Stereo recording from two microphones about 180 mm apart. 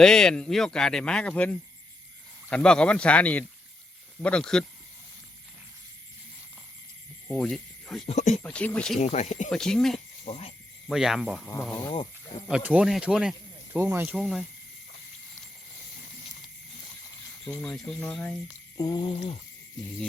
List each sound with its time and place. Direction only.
0.0 s speech: 5° left (ahead or behind)
7.3 s speech: centre (ahead or behind)
8.0 s speech: 40° left (ahead or behind)
8.4 s speech: 10° left (ahead or behind)
9.0 s speech: 40° left (ahead or behind)
9.5 s speech: 5° left (ahead or behind)
10.2 s speech: 30° left (ahead or behind)
10.8 s speech: centre (ahead or behind)
12.5 s speech: 5° right (ahead or behind)
17.4 s speech: 5° left (ahead or behind)
18.8 s a sound: 25° left (ahead or behind)